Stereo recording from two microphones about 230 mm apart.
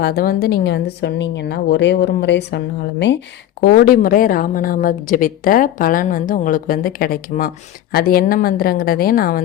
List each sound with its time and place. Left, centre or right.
0.0 s a woman's voice: left